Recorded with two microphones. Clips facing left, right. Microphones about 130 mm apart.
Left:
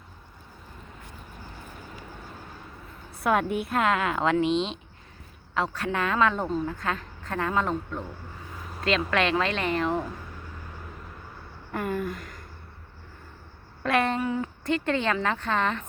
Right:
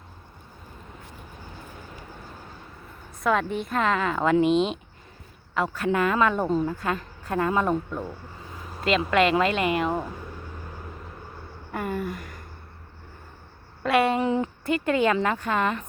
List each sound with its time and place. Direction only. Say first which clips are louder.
3.2 s a woman's voice: even; 10° left (ahead or behind); by 10.1 s 10° right (ahead or behind)
11.7 s a sound: even; 5° right (ahead or behind)
13.8 s a woman's voice: right 3 dB; 5° right (ahead or behind)
14.2 s speech: right 4 dB; 25° right (ahead or behind)
14.6 s speech: right 2 dB; 10° right (ahead or behind)